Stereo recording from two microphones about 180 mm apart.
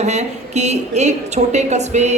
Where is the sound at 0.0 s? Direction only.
40° right (ahead or behind).